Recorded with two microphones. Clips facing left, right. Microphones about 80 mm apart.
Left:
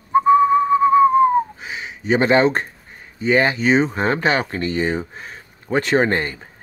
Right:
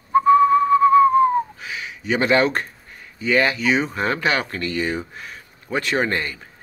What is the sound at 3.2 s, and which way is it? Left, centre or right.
Speech, left.